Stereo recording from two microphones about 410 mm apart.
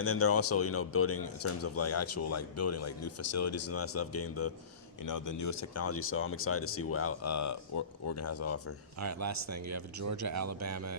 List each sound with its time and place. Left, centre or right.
0.0 s speech: left
5.0 s speech: left
9.0 s speech: right